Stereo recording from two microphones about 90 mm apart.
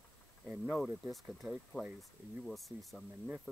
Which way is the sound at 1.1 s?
Centre (ahead or behind).